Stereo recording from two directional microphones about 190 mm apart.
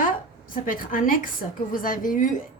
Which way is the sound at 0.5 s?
45° left (ahead or behind).